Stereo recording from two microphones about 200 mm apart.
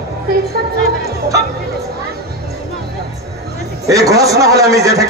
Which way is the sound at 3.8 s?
15° right (ahead or behind).